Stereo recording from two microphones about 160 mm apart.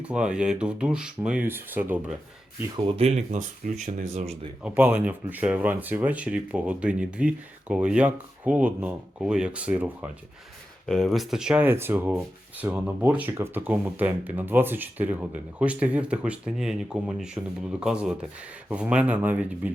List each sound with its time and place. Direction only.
0.0 s speech: 5° right (ahead or behind)
2.7 s speech: 35° right (ahead or behind)
4.6 s speech: 10° right (ahead or behind)
10.8 s speech: 5° left (ahead or behind)